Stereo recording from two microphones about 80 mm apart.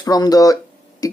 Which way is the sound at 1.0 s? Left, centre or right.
Left.